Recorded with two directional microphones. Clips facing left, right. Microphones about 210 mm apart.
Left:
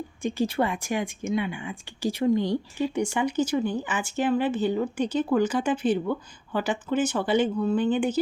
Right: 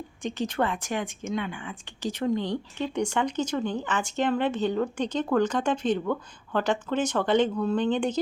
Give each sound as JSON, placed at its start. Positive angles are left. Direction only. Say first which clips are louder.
{"t": 0.2, "sound": "speech", "louder": "left 2 dB", "side_deg": 10}